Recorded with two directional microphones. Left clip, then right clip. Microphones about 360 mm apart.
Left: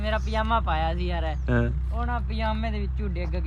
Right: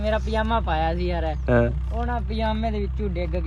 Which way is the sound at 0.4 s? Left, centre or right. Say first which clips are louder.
Right 2 dB; centre.